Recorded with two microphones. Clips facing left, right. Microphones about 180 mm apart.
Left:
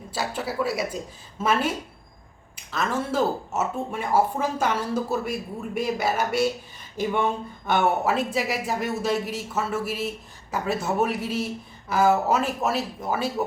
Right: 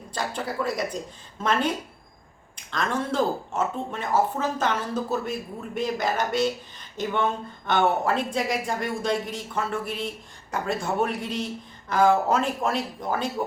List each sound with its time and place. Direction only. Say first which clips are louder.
0.1 s speech: left 1 dB; 5° left (ahead or behind)
2.7 s speech: even; 5° left (ahead or behind)